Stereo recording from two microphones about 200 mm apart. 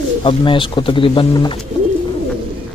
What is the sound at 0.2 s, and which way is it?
Speech, 25° left (ahead or behind).